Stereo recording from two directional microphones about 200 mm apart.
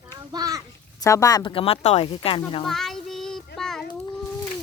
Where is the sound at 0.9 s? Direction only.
15° left (ahead or behind).